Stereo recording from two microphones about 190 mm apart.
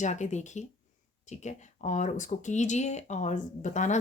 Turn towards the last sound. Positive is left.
turn(degrees=40)  # may be behind; listen again after turning